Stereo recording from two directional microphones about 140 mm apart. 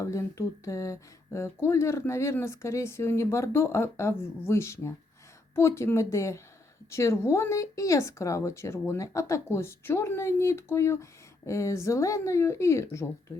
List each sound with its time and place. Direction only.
0.0 s speech: 20° left (ahead or behind)